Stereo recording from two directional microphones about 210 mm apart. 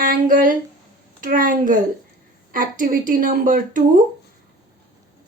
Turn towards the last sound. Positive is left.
turn(degrees=-40)  # may be behind; listen again after turning